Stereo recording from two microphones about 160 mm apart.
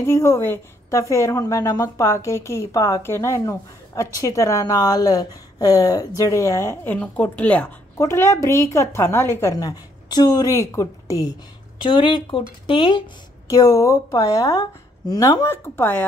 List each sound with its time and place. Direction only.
0.0 s a woman's voice: 15° left (ahead or behind)